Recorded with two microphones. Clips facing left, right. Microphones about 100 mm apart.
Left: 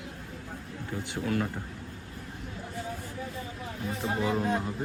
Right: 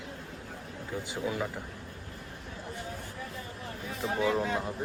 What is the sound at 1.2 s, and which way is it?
Speech, 15° right (ahead or behind).